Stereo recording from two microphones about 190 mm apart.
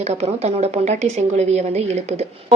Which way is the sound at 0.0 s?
35° right (ahead or behind).